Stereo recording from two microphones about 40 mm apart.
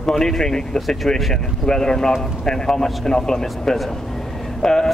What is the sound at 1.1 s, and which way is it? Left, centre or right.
Speech, centre.